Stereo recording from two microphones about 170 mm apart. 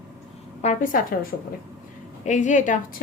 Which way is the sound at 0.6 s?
45° left (ahead or behind).